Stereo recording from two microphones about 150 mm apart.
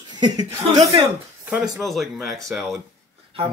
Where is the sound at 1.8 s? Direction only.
Centre (ahead or behind).